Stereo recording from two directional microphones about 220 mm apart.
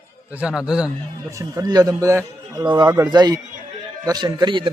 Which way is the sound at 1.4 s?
15° right (ahead or behind).